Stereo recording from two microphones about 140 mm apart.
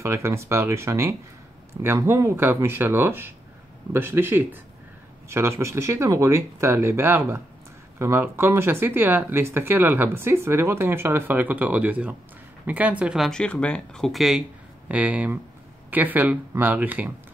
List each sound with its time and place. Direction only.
0.0 s speech: 20° right (ahead or behind)
13.3 s speech: 5° left (ahead or behind); by 17.1 s 10° right (ahead or behind)